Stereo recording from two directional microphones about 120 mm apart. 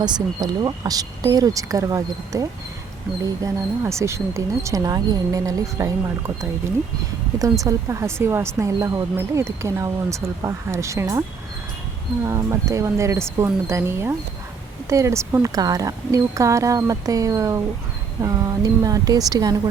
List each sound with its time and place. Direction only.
0.0 s speech: 35° right (ahead or behind)
7.6 s speech: 25° right (ahead or behind)
12.2 s speech: 25° right (ahead or behind)